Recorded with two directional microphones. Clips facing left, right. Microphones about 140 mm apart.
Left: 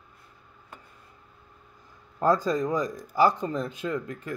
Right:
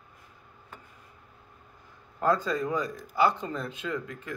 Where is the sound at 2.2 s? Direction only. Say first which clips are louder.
Left 3 dB; 40° left (ahead or behind).